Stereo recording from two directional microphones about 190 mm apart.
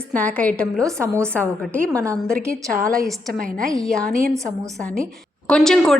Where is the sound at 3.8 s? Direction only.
5° left (ahead or behind).